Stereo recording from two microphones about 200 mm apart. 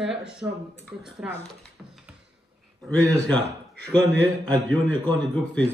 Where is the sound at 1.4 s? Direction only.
Centre (ahead or behind).